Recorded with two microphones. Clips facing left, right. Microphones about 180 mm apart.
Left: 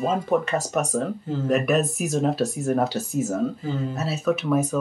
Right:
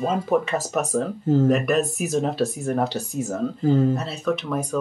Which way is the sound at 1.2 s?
45° right (ahead or behind).